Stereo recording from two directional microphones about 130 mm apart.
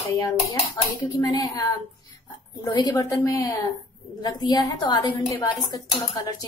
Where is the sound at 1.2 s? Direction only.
30° left (ahead or behind).